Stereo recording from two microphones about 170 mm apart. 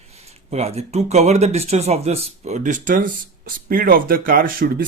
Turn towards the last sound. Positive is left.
turn(degrees=-60)  # may be behind; listen again after turning